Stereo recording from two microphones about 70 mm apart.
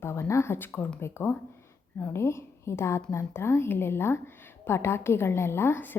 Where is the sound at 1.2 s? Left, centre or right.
Left.